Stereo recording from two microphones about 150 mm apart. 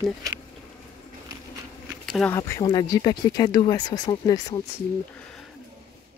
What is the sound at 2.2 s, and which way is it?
Speech, 20° left (ahead or behind).